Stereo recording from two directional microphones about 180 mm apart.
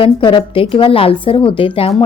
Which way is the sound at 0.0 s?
30° left (ahead or behind).